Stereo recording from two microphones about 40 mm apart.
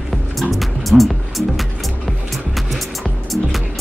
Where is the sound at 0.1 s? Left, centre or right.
Centre.